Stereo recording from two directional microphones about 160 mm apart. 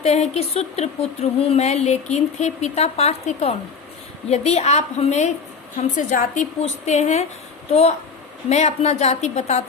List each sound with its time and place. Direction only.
0.0 s a woman's voice: 45° left (ahead or behind)